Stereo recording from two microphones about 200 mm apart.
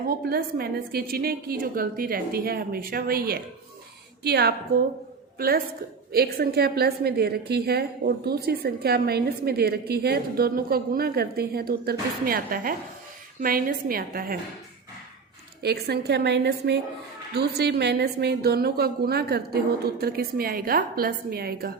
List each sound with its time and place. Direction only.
0.1 s a woman's voice: 50° right (ahead or behind)
15.6 s a woman's voice: 55° right (ahead or behind)